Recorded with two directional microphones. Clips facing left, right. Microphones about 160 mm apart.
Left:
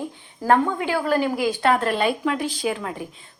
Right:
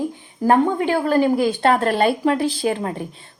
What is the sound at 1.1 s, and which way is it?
Speech, 25° right (ahead or behind).